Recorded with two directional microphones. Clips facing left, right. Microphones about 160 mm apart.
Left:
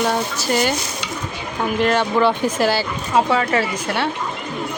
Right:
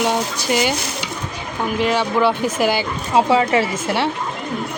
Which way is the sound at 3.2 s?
25° right (ahead or behind).